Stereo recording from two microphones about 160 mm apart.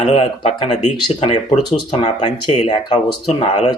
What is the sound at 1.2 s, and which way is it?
Speech, 45° left (ahead or behind).